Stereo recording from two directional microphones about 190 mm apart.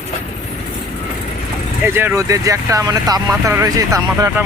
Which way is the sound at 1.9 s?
10° right (ahead or behind).